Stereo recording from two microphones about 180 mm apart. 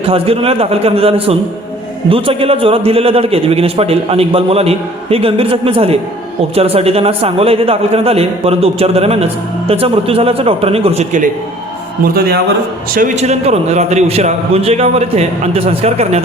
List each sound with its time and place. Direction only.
0.0 s a man's voice: 30° right (ahead or behind)
12.9 s a man's voice: 45° right (ahead or behind)